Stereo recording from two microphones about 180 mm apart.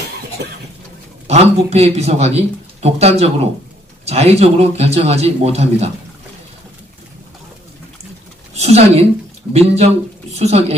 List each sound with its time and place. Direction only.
0.4 s cough: 65° right (ahead or behind)
1.2 s a man's voice: 35° right (ahead or behind)
8.5 s a man's voice: 35° right (ahead or behind)